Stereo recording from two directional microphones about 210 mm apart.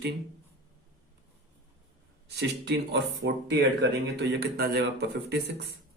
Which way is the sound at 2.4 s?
55° right (ahead or behind).